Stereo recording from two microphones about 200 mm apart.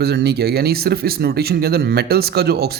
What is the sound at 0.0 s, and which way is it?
Speech, 55° right (ahead or behind).